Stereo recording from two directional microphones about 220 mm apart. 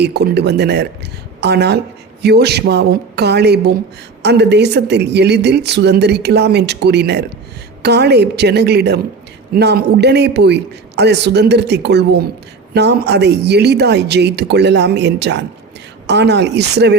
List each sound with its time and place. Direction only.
0.0 s speech: 45° right (ahead or behind)